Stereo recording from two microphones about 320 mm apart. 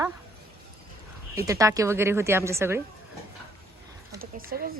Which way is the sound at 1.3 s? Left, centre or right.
Centre.